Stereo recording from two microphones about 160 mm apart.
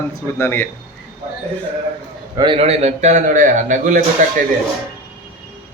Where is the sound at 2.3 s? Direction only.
30° right (ahead or behind); by 4.0 s 50° right (ahead or behind).